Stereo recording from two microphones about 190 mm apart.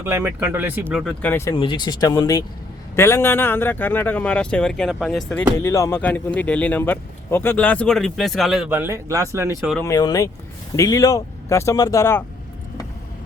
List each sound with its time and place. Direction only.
0.0 s speech: 10° right (ahead or behind)
0.9 s speech: centre (ahead or behind)
1.3 s speech: 15° left (ahead or behind)
1.5 s speech: 25° left (ahead or behind); by 9.5 s 15° right (ahead or behind)
9.7 s speech: 15° left (ahead or behind)